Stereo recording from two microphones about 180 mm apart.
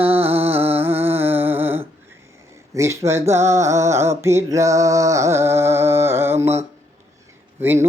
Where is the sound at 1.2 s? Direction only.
10° right (ahead or behind).